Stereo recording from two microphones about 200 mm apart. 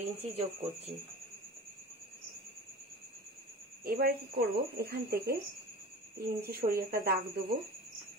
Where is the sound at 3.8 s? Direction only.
50° right (ahead or behind).